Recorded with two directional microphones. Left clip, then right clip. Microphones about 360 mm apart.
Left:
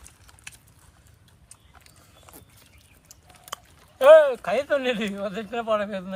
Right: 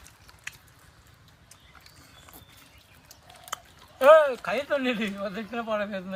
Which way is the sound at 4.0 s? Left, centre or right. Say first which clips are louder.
Left 3 dB; left.